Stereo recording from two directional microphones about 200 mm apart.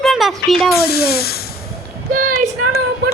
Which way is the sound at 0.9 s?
50° left (ahead or behind).